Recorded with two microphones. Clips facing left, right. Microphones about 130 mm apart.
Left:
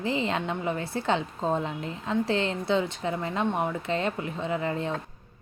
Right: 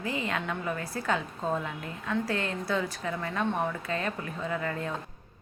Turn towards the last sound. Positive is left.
turn(degrees=25)  # may be behind; listen again after turning